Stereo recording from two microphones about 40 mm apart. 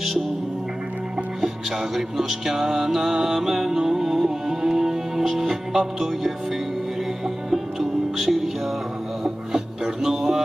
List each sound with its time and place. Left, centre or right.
2.0 s music: centre
3.3 s music: centre
7.5 s music: centre
10.0 s music: centre